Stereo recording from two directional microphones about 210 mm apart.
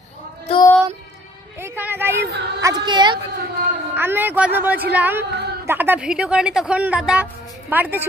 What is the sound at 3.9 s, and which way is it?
A woman's voice, 10° right (ahead or behind).